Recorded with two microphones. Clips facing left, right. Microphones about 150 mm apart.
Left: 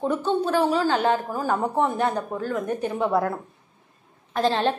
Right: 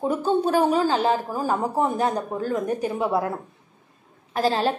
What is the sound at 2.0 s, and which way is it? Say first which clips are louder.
Speech: right 1 dB; 35° right (ahead or behind).